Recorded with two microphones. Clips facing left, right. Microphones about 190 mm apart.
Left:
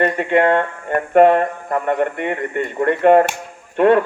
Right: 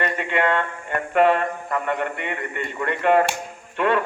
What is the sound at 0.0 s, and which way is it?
A man's voice, 45° left (ahead or behind).